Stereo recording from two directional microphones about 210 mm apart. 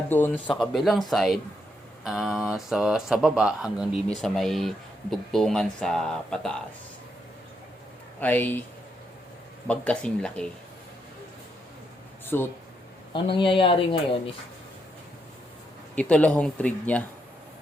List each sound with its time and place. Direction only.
0.1 s speech: 10° left (ahead or behind)
8.2 s speech: 10° left (ahead or behind)
9.6 s speech: 5° left (ahead or behind)
12.2 s a sound: 10° left (ahead or behind)
13.1 s speech: 25° left (ahead or behind)
16.0 s speech: 5° left (ahead or behind)